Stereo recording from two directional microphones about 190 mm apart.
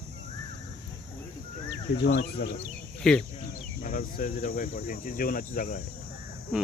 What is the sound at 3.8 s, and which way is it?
Speech, 45° left (ahead or behind).